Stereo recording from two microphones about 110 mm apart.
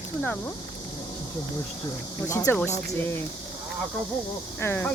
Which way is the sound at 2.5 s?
20° left (ahead or behind).